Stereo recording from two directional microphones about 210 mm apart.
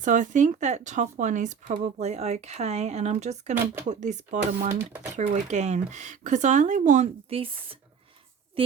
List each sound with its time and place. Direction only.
0.0 s speech: 35° right (ahead or behind)
4.8 s speech: 10° right (ahead or behind)
5.1 s speech: 35° right (ahead or behind)